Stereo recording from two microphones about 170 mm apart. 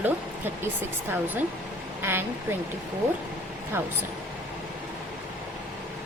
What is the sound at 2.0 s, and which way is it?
Speech, 15° right (ahead or behind).